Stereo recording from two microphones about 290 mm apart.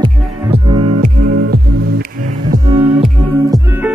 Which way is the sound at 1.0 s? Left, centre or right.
Right.